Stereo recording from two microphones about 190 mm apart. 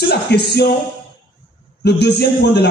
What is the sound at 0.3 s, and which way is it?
Speech, 60° left (ahead or behind).